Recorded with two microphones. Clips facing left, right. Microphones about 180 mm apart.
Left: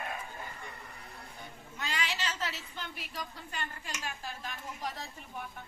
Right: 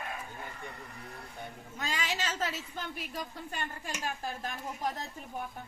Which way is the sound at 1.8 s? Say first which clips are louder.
Right 2 dB; 45° right (ahead or behind).